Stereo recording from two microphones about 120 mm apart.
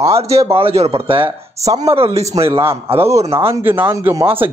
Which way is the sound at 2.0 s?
55° right (ahead or behind).